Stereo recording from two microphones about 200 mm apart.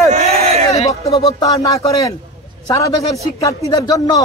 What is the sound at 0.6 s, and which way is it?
Speech, 15° left (ahead or behind).